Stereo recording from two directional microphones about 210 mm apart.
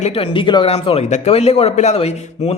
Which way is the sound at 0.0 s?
25° left (ahead or behind).